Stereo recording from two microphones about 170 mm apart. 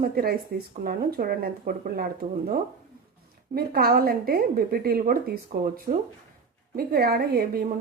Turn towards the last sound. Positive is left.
turn(degrees=-65)  # may be behind; listen again after turning